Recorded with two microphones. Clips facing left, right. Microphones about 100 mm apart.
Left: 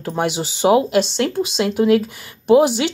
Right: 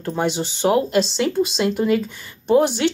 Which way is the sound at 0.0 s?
5° left (ahead or behind).